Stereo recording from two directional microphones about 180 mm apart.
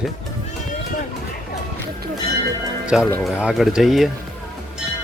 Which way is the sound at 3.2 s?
Centre (ahead or behind).